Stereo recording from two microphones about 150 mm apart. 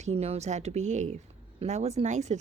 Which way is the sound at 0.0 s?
45° right (ahead or behind).